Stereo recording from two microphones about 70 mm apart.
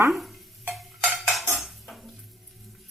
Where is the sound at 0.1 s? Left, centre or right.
Centre.